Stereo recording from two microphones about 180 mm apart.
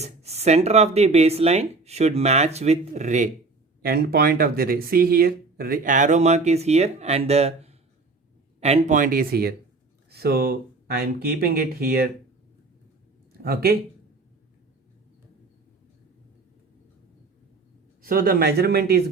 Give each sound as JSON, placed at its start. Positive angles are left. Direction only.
{"t": 0.0, "sound": "speech", "side_deg": -35}
{"t": 3.8, "sound": "speech", "side_deg": -55}
{"t": 13.4, "sound": "speech", "side_deg": -60}
{"t": 18.0, "sound": "speech", "side_deg": -55}